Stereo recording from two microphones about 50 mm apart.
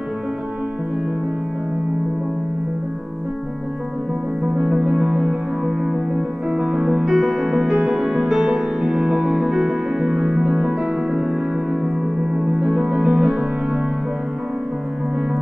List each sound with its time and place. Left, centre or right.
4.7 s music: centre
5.2 s music: centre
7.1 s music: centre
7.7 s music: centre